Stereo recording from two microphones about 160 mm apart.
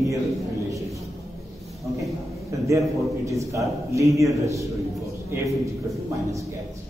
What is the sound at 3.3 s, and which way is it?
A man's voice, 20° right (ahead or behind).